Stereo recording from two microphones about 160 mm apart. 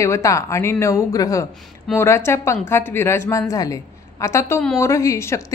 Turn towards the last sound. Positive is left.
turn(degrees=15)  # may be behind; listen again after turning